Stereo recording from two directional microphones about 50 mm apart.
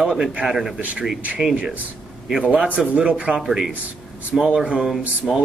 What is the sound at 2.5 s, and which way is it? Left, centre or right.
Speech, right.